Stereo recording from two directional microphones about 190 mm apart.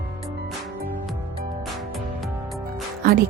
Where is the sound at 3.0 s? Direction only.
50° right (ahead or behind).